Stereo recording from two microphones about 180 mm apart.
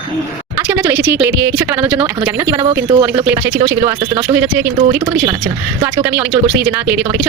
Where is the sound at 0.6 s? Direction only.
10° right (ahead or behind).